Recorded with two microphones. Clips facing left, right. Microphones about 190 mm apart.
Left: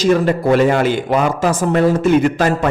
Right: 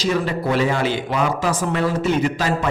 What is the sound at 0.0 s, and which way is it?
A man's voice, 50° left (ahead or behind).